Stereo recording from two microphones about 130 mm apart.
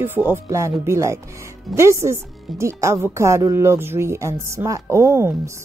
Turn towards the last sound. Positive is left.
turn(degrees=-20)  # may be behind; listen again after turning